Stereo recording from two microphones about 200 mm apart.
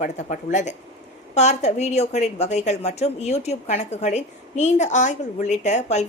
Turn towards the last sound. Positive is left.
turn(degrees=35)  # may be behind; listen again after turning